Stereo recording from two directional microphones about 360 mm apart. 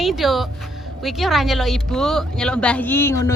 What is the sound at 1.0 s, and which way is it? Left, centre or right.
A woman's voice, centre.